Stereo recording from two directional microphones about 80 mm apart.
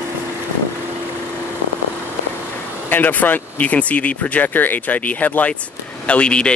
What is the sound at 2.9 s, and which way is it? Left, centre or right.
Speech, left.